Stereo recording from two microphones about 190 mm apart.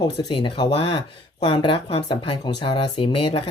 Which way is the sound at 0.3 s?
25° left (ahead or behind).